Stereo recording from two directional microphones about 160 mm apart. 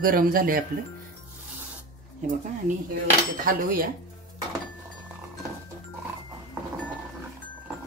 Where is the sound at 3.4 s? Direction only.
65° right (ahead or behind).